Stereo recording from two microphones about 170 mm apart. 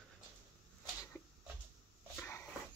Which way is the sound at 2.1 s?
15° left (ahead or behind).